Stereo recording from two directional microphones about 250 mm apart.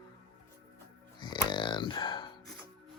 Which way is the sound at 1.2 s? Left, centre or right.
Centre.